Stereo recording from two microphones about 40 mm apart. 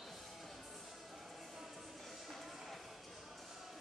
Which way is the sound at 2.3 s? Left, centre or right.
Centre.